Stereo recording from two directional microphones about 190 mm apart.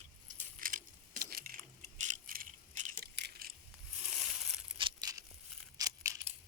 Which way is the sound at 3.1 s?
60° right (ahead or behind).